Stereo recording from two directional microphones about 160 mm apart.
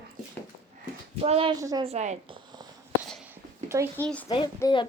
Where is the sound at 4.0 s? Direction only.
10° left (ahead or behind).